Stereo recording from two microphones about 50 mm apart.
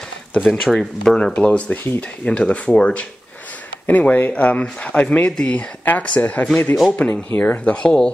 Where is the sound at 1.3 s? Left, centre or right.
Left.